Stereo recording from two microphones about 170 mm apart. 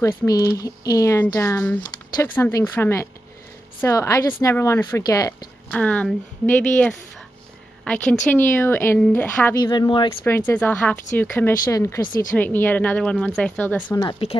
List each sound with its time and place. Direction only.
0.0 s speech: 15° left (ahead or behind)
5.7 s a woman's voice: 10° left (ahead or behind)
9.6 s speech: 25° left (ahead or behind)
10.2 s speech: 10° left (ahead or behind)
12.4 s speech: 10° left (ahead or behind)
13.8 s speech: 25° left (ahead or behind)